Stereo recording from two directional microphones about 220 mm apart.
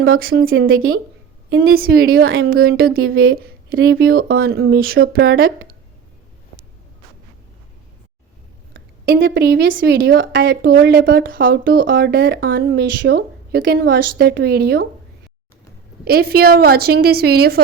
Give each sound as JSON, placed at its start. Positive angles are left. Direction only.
{"t": 0.3, "sound": "a woman's voice", "side_deg": -65}
{"t": 2.4, "sound": "a woman's voice", "side_deg": -45}
{"t": 3.0, "sound": "a woman's voice", "side_deg": -70}
{"t": 3.3, "sound": "a sound", "side_deg": -45}
{"t": 3.9, "sound": "a woman's voice", "side_deg": -45}
{"t": 8.7, "sound": "a woman's voice", "side_deg": -45}
{"t": 16.0, "sound": "a woman's voice", "side_deg": -45}